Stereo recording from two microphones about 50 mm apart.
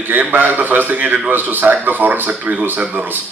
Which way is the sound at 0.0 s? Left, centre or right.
Right.